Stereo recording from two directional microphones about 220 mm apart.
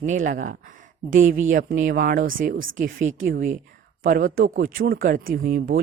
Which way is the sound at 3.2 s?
40° right (ahead or behind).